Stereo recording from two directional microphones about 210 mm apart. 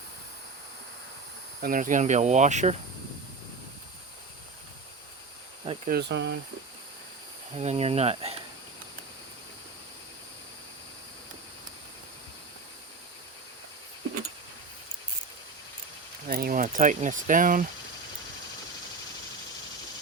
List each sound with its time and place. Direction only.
1.6 s speech: 40° right (ahead or behind)
5.9 s speech: 55° right (ahead or behind)
7.5 s speech: 30° right (ahead or behind)
16.2 s speech: 40° right (ahead or behind)